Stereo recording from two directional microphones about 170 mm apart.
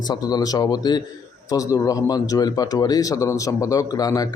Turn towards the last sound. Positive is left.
turn(degrees=20)  # may be behind; listen again after turning